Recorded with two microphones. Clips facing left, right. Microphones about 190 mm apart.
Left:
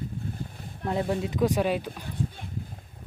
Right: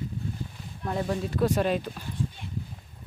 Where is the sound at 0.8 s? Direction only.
25° left (ahead or behind).